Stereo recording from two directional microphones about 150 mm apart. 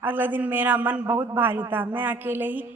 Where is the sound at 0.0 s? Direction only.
15° right (ahead or behind).